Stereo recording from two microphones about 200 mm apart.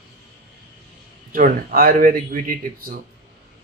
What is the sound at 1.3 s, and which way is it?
Speech, 45° right (ahead or behind).